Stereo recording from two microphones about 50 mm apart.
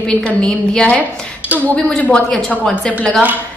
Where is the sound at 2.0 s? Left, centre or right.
Left.